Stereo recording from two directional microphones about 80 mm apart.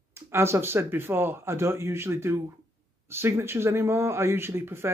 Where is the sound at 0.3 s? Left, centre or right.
Right.